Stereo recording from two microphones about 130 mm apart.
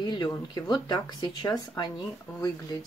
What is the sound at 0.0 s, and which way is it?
Speech, 35° left (ahead or behind).